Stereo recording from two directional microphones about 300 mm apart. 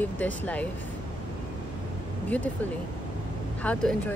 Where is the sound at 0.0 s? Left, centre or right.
Centre.